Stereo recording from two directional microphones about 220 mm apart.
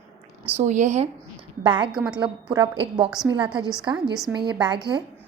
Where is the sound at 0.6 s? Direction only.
35° right (ahead or behind).